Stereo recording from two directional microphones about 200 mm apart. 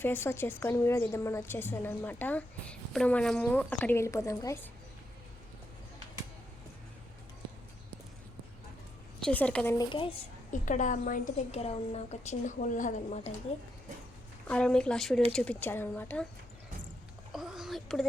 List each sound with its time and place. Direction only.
0.0 s a woman's voice: 10° left (ahead or behind)
9.2 s speech: 5° left (ahead or behind)
9.7 s speech: 25° left (ahead or behind)
10.5 s a woman's voice: 40° left (ahead or behind)
14.4 s a woman's voice: 5° left (ahead or behind)
17.3 s a sound: centre (ahead or behind)